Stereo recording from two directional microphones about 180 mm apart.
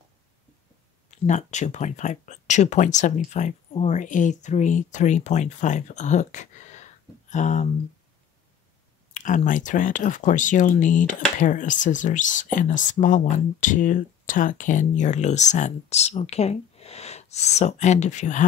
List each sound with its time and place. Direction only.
1.2 s speech: 40° left (ahead or behind)
9.1 s speech: 45° left (ahead or behind)